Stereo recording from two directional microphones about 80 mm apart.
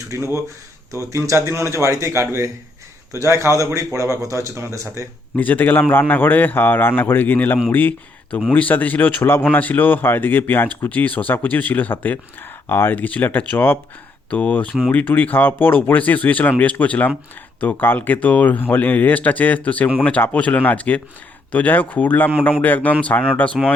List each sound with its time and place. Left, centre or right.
0.1 s a man's voice: right
5.4 s speech: left